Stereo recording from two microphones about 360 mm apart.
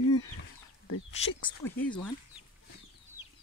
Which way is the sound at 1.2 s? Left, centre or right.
Centre.